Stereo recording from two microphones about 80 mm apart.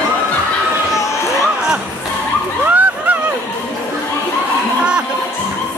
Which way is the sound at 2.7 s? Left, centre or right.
Right.